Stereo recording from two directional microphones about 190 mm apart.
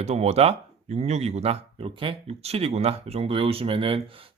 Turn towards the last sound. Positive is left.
turn(degrees=-30)  # may be behind; listen again after turning